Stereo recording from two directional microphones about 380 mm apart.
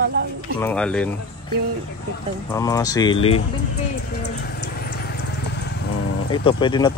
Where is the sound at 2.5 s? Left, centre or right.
Centre.